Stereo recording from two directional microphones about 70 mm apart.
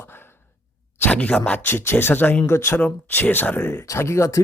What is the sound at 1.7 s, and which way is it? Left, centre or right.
Speech, left.